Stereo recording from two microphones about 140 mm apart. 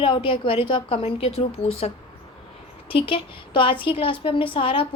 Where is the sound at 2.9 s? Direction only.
40° left (ahead or behind).